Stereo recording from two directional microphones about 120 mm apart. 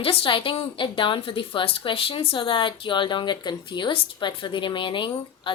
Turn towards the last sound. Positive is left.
turn(degrees=45)  # may be behind; listen again after turning